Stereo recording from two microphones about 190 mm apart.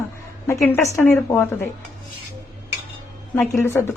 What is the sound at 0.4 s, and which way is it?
Speech, 15° left (ahead or behind).